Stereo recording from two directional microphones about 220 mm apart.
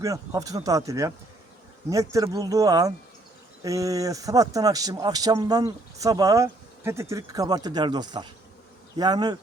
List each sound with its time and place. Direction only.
0.0 s speech: 15° right (ahead or behind)